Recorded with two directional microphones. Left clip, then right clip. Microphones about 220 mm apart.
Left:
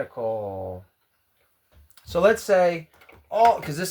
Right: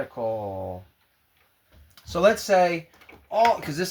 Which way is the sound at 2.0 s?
25° left (ahead or behind).